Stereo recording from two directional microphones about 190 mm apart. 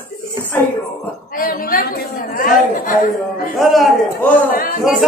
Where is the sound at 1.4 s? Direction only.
50° left (ahead or behind).